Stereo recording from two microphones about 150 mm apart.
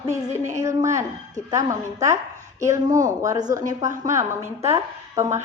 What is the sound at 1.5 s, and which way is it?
A woman's voice, 20° right (ahead or behind).